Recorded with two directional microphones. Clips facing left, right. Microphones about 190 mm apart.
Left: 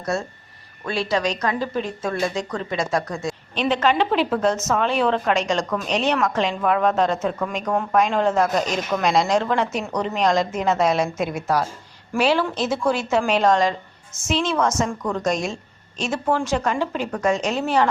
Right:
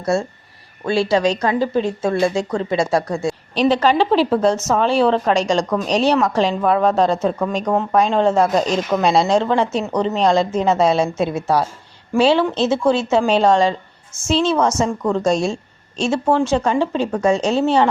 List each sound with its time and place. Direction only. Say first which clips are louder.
0.0 s a woman's voice: right 6 dB; 25° right (ahead or behind)